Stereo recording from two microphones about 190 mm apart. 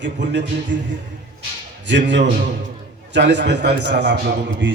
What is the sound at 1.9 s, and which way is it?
A man's voice, 65° right (ahead or behind).